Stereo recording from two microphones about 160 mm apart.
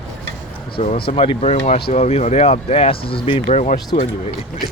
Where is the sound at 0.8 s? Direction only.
40° left (ahead or behind).